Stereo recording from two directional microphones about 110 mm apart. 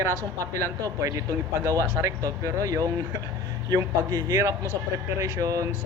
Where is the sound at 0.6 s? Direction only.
30° right (ahead or behind).